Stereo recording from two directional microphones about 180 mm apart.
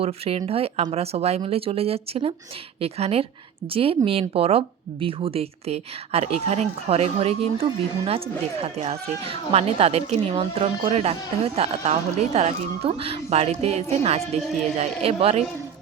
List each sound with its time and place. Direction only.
0.0 s speech: 35° right (ahead or behind)